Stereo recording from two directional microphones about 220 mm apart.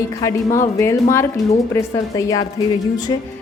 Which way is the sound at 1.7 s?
15° left (ahead or behind).